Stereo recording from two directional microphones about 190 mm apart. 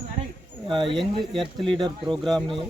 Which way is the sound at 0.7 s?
25° right (ahead or behind).